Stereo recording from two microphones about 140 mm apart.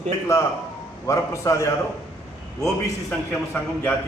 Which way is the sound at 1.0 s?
20° left (ahead or behind).